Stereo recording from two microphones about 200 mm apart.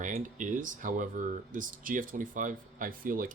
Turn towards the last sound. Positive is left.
turn(degrees=-45)  # may be behind; listen again after turning